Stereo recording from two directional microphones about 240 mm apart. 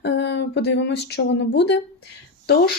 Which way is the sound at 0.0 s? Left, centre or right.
Left.